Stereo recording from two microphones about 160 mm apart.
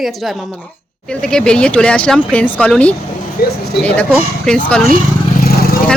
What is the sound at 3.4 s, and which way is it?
Speech, 70° left (ahead or behind).